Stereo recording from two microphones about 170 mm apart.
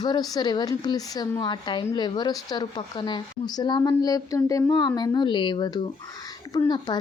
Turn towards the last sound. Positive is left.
turn(degrees=25)  # may be behind; listen again after turning